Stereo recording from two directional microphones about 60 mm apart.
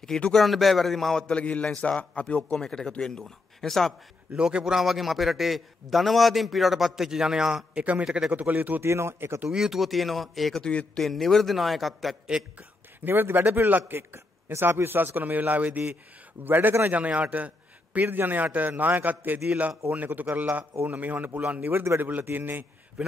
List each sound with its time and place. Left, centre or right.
0.3 s a man's voice: centre
1.2 s speech: left
2.5 s speech: centre
4.3 s a man's voice: centre
8.4 s a man's voice: right
8.8 s speech: right
9.5 s a man's voice: centre
10.6 s speech: centre
11.1 s a man's voice: centre
12.5 s a man's voice: right
21.8 s a man's voice: right
23.0 s a man's voice: centre